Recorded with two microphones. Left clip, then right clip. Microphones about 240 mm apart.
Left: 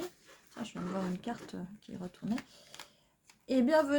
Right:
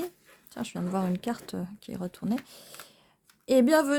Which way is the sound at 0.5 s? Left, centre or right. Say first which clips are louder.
Right 7 dB; right.